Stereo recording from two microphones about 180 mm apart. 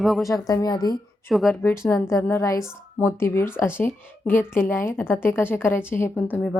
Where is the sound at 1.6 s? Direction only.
10° left (ahead or behind).